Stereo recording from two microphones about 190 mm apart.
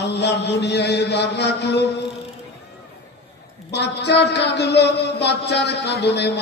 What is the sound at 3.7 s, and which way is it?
A man's voice, 65° left (ahead or behind).